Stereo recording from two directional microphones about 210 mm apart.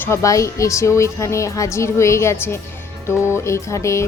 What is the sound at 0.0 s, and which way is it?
A woman's voice, 15° left (ahead or behind).